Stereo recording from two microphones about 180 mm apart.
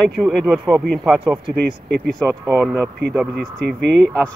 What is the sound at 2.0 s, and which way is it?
Speech, centre (ahead or behind).